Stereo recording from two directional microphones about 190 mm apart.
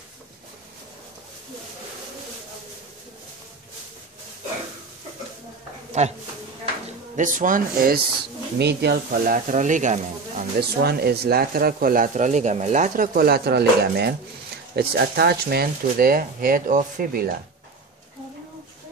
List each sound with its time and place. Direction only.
6.0 s speech: 35° right (ahead or behind)
7.2 s speech: 45° right (ahead or behind)
8.5 s speech: 60° right (ahead or behind); by 10.4 s 40° right (ahead or behind)
10.6 s speech: 55° right (ahead or behind)